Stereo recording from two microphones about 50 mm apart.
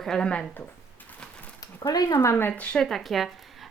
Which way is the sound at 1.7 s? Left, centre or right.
Left.